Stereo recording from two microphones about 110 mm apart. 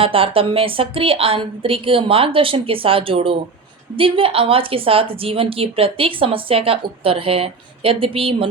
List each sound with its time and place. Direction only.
0.0 s a woman's voice: 55° right (ahead or behind)